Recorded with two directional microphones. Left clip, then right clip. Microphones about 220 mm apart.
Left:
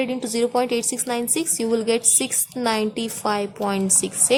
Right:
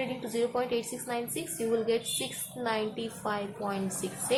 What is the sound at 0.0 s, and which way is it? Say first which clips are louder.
A woman's voice: left 8 dB; 55° left (ahead or behind).